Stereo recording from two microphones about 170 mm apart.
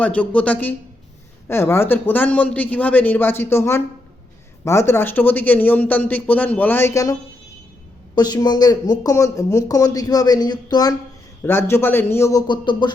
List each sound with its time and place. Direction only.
0.0 s a man's voice: 10° left (ahead or behind); by 12.9 s 25° left (ahead or behind)